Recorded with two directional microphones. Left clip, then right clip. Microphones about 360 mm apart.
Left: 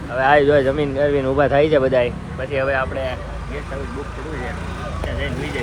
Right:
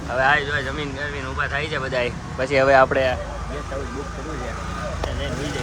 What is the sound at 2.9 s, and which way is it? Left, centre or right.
Speech, centre.